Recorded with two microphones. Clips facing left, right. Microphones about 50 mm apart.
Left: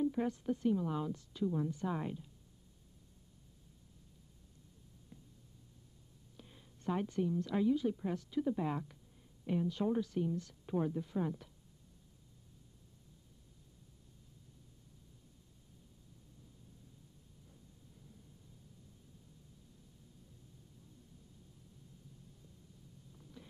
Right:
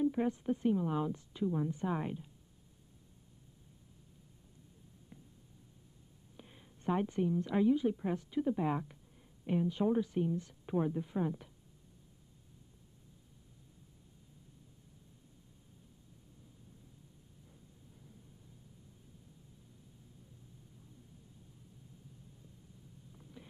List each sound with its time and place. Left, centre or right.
0.0 s a woman's voice: right
6.3 s a woman's voice: right